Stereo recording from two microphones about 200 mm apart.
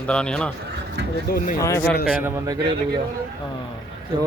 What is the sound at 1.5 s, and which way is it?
Speech, 15° left (ahead or behind).